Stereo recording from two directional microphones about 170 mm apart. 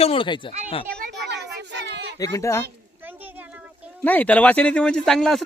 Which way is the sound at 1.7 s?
80° right.